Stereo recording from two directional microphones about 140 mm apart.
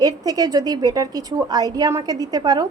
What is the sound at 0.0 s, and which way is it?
A woman's voice, 30° right (ahead or behind).